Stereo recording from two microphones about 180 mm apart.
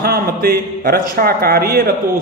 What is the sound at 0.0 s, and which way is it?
A man's voice, 55° right (ahead or behind).